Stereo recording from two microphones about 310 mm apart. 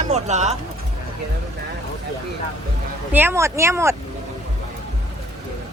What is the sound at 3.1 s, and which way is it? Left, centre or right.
Speech, centre.